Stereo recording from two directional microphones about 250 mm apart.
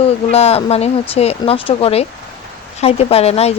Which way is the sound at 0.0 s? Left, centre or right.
Left.